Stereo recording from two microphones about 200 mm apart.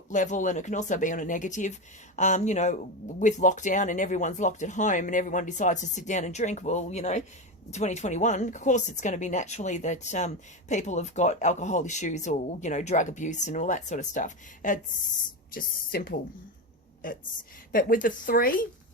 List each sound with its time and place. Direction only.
0.1 s a woman's voice: 40° left (ahead or behind)